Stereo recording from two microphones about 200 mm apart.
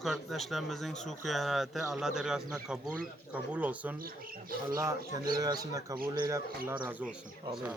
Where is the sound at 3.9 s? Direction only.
45° right (ahead or behind).